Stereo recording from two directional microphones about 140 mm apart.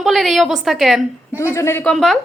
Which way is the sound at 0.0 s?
Centre (ahead or behind).